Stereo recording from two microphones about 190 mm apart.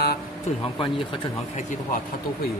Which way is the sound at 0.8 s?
25° left (ahead or behind).